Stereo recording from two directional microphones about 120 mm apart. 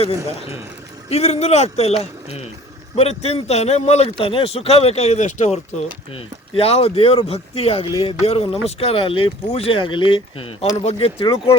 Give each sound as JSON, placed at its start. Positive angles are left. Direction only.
{"t": 1.1, "sound": "speech", "side_deg": 60}
{"t": 4.2, "sound": "speech", "side_deg": 50}
{"t": 6.1, "sound": "speech", "side_deg": 55}